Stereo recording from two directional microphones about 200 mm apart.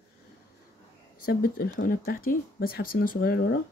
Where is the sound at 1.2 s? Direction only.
45° left (ahead or behind).